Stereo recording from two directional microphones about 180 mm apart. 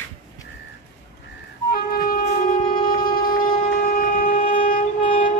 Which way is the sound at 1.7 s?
55° left (ahead or behind).